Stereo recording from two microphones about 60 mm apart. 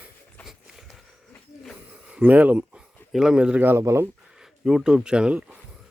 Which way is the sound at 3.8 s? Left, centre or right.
Right.